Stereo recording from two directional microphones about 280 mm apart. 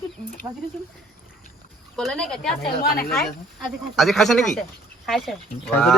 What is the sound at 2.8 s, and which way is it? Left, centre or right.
Speech, left.